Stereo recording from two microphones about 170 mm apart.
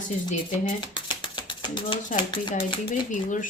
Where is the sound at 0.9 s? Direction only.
30° left (ahead or behind).